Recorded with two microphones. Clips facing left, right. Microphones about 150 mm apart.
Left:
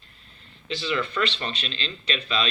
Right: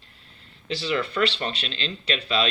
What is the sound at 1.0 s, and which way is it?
Speech, 30° right (ahead or behind).